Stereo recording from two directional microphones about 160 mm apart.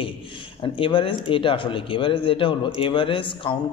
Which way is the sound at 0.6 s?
35° left (ahead or behind).